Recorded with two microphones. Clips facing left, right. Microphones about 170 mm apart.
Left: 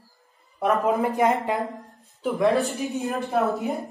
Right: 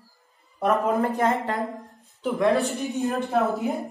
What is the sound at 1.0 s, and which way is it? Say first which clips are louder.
Speech: left 2 dB; 15° left (ahead or behind).